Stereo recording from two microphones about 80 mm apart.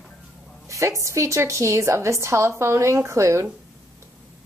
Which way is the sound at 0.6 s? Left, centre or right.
Right.